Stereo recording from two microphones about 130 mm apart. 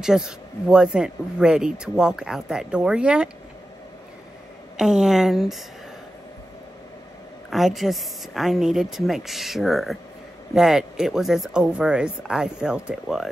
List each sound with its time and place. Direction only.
0.0 s speech: 5° right (ahead or behind)
4.7 s speech: 5° right (ahead or behind)
7.4 s speech: centre (ahead or behind)